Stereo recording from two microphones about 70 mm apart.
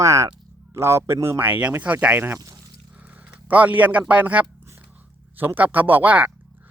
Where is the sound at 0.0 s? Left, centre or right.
Right.